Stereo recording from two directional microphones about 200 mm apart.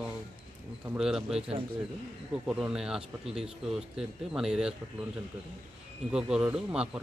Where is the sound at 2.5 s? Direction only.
5° right (ahead or behind).